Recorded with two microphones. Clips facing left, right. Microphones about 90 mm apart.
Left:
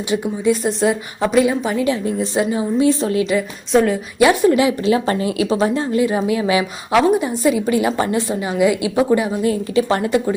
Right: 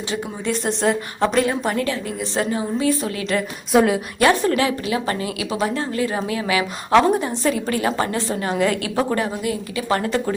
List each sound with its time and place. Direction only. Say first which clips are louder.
0.1 s a woman's voice: left 8 dB; 5° left (ahead or behind)
2.3 s a woman's voice: left 2 dB; 20° left (ahead or behind)
3.7 s a woman's voice: left 1 dB; 5° right (ahead or behind)
4.2 s a woman's voice: left 5 dB; 15° left (ahead or behind)
4.8 s a woman's voice: left 6 dB; 30° left (ahead or behind); by 9.3 s 10° left (ahead or behind)
9.4 s a woman's voice: left 8 dB; 30° left (ahead or behind)